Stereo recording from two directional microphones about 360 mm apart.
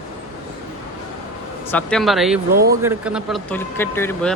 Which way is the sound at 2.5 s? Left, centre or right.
Right.